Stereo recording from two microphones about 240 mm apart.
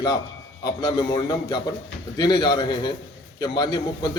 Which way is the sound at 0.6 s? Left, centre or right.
Centre.